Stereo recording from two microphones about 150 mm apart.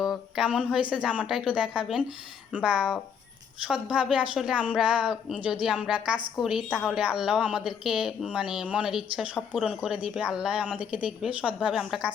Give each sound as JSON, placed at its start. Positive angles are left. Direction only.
{"t": 0.0, "sound": "a woman's voice", "side_deg": -5}